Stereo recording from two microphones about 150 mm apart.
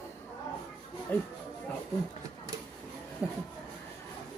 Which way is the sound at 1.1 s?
10° left (ahead or behind).